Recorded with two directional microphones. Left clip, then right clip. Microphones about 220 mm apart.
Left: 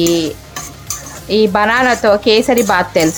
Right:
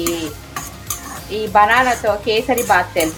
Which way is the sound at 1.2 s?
45° left (ahead or behind).